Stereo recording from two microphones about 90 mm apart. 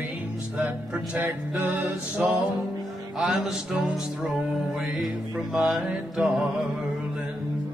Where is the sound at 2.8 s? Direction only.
Centre (ahead or behind).